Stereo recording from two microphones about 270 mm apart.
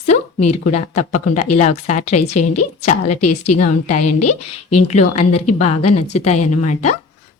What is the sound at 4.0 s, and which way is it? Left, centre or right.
Speech, left.